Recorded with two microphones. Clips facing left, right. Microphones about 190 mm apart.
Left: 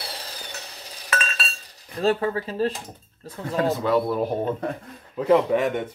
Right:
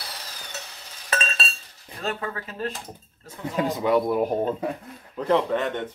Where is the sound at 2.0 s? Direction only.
30° left (ahead or behind).